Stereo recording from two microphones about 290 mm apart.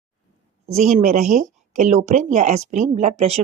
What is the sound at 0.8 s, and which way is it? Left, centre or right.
Speech, right.